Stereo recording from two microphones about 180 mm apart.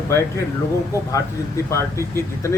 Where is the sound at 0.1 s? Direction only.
15° left (ahead or behind).